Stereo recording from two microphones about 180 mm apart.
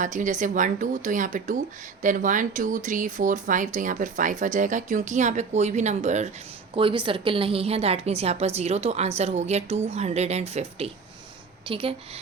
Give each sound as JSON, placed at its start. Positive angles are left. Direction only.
{"t": 0.0, "sound": "speech", "side_deg": -45}
{"t": 6.7, "sound": "a woman's voice", "side_deg": -30}